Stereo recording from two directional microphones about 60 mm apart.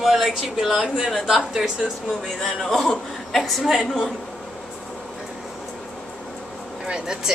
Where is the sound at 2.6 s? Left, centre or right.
Centre.